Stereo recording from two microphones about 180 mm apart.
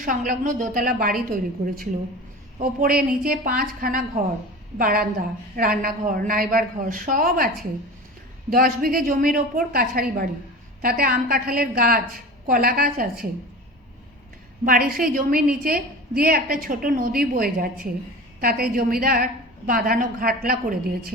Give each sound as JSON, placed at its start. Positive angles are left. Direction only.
{"t": 0.0, "sound": "a woman's voice", "side_deg": -50}
{"t": 14.6, "sound": "a woman's voice", "side_deg": -50}